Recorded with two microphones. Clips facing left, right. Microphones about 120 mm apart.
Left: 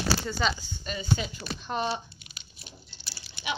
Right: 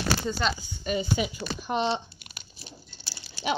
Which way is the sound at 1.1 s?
10° right (ahead or behind).